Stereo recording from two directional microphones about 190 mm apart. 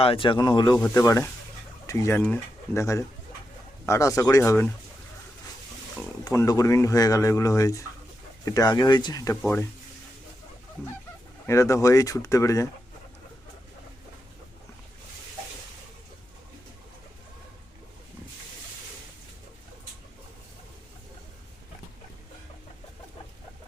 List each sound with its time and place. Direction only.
0.0 s speech: 30° left (ahead or behind)
6.0 s speech: 15° left (ahead or behind)
11.4 s speech: 15° left (ahead or behind)